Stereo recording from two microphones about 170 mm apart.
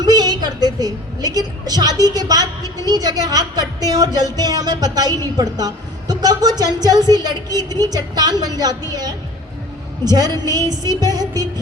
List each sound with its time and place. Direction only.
0.0 s a woman's voice: 25° right (ahead or behind)